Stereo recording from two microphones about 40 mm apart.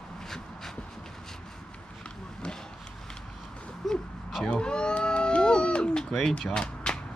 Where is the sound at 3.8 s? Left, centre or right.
Centre.